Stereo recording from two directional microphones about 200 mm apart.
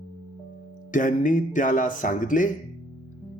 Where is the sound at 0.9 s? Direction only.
40° left (ahead or behind).